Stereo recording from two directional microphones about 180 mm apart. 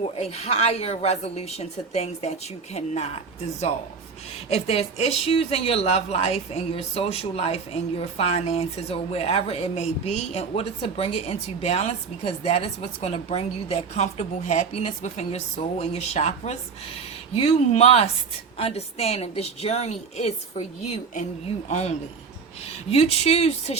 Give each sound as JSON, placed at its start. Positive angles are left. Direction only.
{"t": 0.2, "sound": "speech", "side_deg": 35}
{"t": 4.4, "sound": "speech", "side_deg": 35}
{"t": 21.7, "sound": "speech", "side_deg": 35}